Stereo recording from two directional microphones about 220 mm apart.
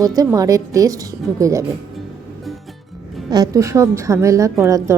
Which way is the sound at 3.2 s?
15° right (ahead or behind).